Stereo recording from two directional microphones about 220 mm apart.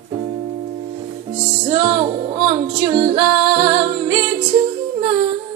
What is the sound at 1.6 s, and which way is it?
Music, 25° right (ahead or behind).